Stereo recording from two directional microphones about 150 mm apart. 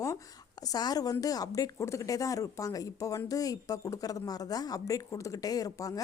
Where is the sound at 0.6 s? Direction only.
25° left (ahead or behind).